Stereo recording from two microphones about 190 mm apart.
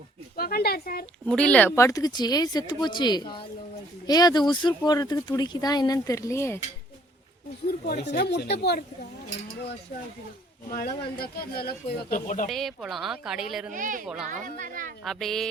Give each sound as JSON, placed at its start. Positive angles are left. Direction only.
{"t": 0.3, "sound": "speech", "side_deg": 55}
{"t": 1.3, "sound": "speech", "side_deg": 5}
{"t": 8.0, "sound": "speech", "side_deg": 60}
{"t": 10.7, "sound": "speech", "side_deg": 50}
{"t": 12.5, "sound": "speech", "side_deg": 0}
{"t": 13.7, "sound": "a woman's voice", "side_deg": -45}
{"t": 15.0, "sound": "speech", "side_deg": 0}